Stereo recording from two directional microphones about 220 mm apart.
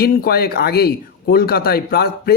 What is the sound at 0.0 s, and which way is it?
Speech, 45° left (ahead or behind).